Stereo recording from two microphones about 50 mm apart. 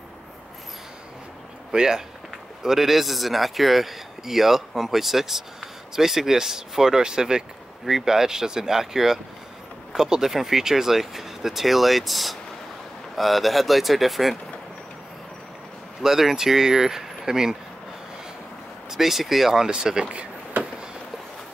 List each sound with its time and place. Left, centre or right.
1.7 s a man's voice: centre
16.0 s a man's voice: centre
18.9 s a man's voice: centre
20.5 s a sound: right